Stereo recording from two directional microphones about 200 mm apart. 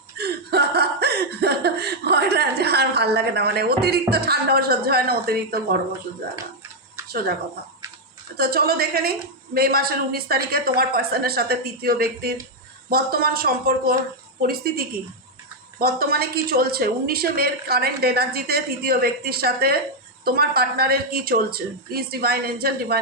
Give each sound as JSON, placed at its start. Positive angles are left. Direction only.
{"t": 0.2, "sound": "a sound", "side_deg": -55}
{"t": 7.1, "sound": "speech", "side_deg": -50}
{"t": 8.4, "sound": "a woman's voice", "side_deg": -50}